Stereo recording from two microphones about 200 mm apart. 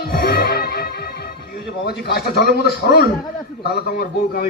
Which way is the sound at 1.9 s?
55° left (ahead or behind).